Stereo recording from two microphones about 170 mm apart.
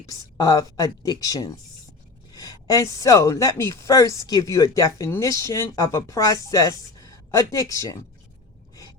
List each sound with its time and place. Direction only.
0.0 s speech: 20° left (ahead or behind)